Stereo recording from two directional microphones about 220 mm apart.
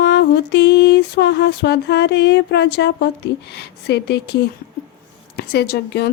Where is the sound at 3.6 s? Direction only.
50° left (ahead or behind).